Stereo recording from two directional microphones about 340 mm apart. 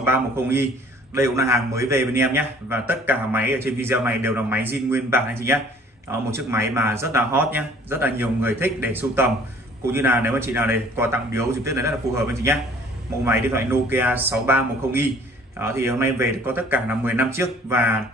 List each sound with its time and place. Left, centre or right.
0.0 s a man's voice: centre